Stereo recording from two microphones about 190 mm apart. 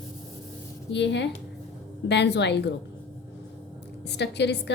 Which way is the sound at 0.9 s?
65° left (ahead or behind).